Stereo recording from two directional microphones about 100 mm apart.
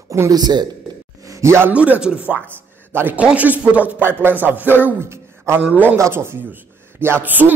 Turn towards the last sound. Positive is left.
turn(degrees=-20)  # may be behind; listen again after turning